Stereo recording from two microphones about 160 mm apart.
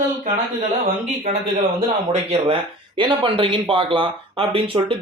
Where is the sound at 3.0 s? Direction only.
30° right (ahead or behind).